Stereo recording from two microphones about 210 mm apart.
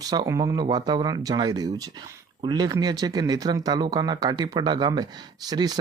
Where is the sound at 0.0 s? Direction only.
20° right (ahead or behind).